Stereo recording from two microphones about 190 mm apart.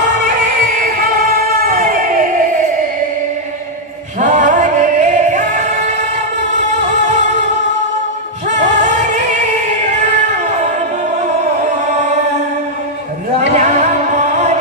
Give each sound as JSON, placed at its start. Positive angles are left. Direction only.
{"t": 0.6, "sound": "music", "side_deg": -50}
{"t": 4.2, "sound": "music", "side_deg": -40}
{"t": 8.5, "sound": "music", "side_deg": -40}
{"t": 13.4, "sound": "a sound", "side_deg": -35}